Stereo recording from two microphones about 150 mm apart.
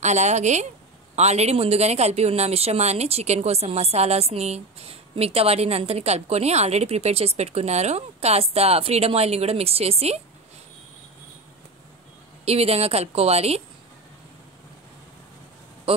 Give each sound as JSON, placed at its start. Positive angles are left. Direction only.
{"t": 0.0, "sound": "speech", "side_deg": -50}
{"t": 12.4, "sound": "speech", "side_deg": -40}